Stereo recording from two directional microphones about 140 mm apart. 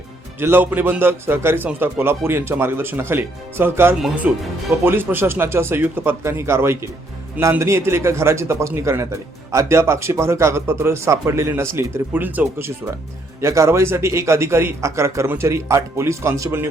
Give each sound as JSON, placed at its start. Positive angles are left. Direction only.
{"t": 0.3, "sound": "a man's voice", "side_deg": -15}